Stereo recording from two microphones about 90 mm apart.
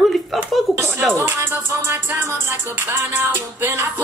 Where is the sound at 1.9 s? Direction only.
30° right (ahead or behind).